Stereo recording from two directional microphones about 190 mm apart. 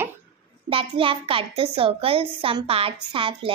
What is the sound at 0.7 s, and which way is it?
A child's voice, 30° right (ahead or behind).